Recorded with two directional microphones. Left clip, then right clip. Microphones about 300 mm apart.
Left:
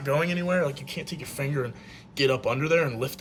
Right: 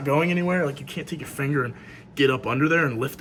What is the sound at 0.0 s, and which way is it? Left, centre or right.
Speech, left.